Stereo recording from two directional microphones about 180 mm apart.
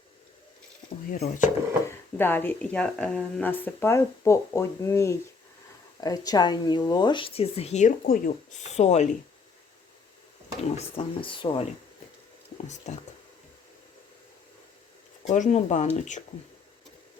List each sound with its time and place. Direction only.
1.1 s speech: 50° left (ahead or behind)
1.9 s speech: 10° left (ahead or behind); by 8.3 s 50° left (ahead or behind)
8.7 s speech: 40° left (ahead or behind)
10.6 s speech: 35° left (ahead or behind)
12.9 s speech: 40° left (ahead or behind)
15.3 s speech: 40° left (ahead or behind)